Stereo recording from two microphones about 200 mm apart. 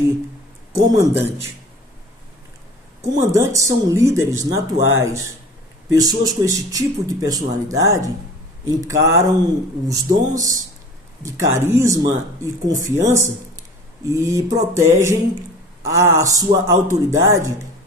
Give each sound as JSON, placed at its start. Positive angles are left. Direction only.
{"t": 0.8, "sound": "speech", "side_deg": -10}
{"t": 3.0, "sound": "speech", "side_deg": -15}